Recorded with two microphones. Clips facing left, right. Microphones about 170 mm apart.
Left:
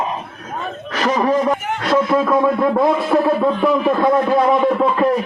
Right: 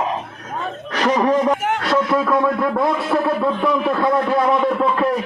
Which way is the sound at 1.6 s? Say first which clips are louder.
Right 3 dB; 80° right.